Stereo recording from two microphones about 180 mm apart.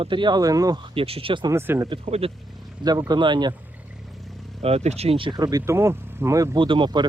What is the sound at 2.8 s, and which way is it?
Speech, 20° right (ahead or behind).